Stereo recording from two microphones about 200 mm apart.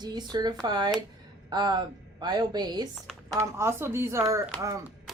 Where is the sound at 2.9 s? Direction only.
Centre (ahead or behind).